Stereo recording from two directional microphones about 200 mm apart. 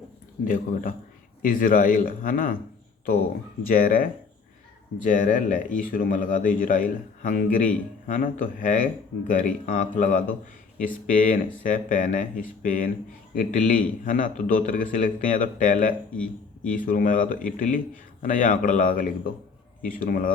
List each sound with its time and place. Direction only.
0.4 s a man's voice: 45° left (ahead or behind)
3.7 s a man's voice: 45° left (ahead or behind)